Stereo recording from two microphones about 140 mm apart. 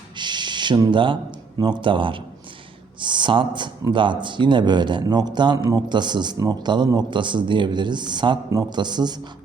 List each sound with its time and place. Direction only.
0.2 s speech: 35° right (ahead or behind)